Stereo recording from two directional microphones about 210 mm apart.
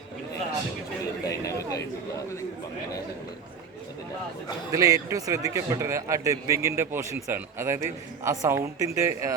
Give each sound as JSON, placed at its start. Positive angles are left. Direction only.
{"t": 1.2, "sound": "chatter", "side_deg": 15}
{"t": 4.7, "sound": "a man's voice", "side_deg": -15}